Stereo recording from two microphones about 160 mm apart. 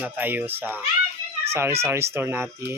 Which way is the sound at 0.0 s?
10° right (ahead or behind).